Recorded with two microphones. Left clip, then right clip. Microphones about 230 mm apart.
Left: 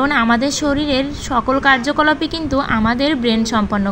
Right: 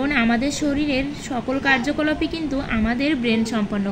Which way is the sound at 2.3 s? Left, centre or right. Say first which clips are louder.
Left 7 dB; centre.